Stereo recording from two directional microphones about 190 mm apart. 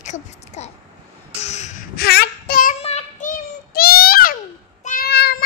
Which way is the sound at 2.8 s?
40° left (ahead or behind).